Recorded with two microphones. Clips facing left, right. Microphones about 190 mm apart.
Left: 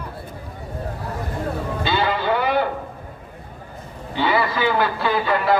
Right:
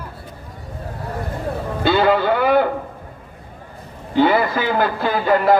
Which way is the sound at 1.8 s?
55° right (ahead or behind).